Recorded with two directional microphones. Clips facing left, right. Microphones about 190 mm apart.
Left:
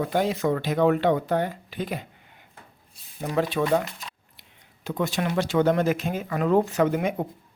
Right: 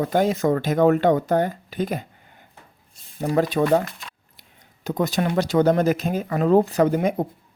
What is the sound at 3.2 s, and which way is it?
Speech, 40° right (ahead or behind).